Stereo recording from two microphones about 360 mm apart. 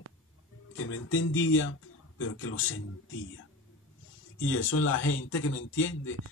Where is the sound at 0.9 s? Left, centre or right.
Left.